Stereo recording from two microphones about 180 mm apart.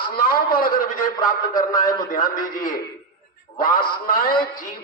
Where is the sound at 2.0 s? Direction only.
50° left (ahead or behind).